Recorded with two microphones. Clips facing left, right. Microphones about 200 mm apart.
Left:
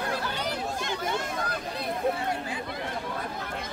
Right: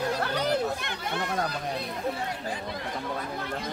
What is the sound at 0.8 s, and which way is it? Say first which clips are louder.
Chatter: left 2 dB; 60° right (ahead or behind).